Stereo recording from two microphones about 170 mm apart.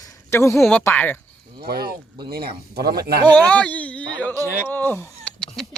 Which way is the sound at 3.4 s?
5° left (ahead or behind).